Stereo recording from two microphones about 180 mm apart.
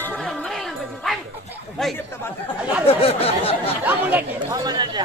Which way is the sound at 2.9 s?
30° left (ahead or behind).